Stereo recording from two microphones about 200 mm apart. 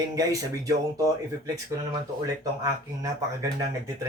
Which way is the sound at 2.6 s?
15° right (ahead or behind).